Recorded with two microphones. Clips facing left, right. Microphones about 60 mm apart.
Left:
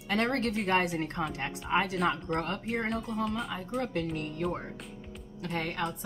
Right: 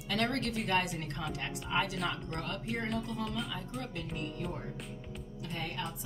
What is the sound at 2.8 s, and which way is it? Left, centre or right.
Speech, left.